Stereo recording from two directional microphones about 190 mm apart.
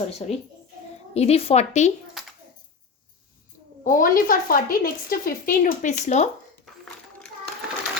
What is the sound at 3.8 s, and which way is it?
A woman's voice, 45° left (ahead or behind).